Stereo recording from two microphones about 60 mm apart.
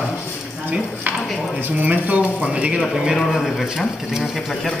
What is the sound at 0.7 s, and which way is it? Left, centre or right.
Speech, right.